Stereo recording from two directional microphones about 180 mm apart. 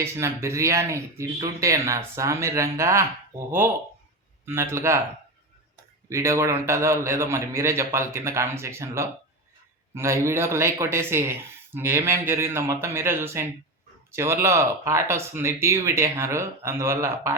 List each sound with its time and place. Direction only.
0.0 s speech: 15° right (ahead or behind)
6.1 s speech: 15° right (ahead or behind)